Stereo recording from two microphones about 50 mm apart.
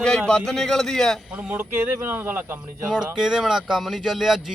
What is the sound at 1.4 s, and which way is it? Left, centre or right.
Speech, right.